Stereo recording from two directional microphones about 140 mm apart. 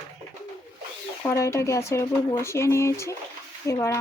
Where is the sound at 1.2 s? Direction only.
20° left (ahead or behind).